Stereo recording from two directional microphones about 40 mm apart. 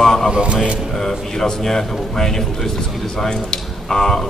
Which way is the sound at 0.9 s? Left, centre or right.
Centre.